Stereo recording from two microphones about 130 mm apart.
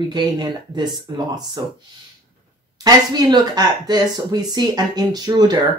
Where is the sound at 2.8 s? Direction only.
30° right (ahead or behind).